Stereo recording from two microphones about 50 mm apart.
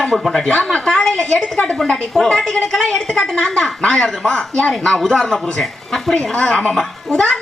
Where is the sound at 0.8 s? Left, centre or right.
Centre.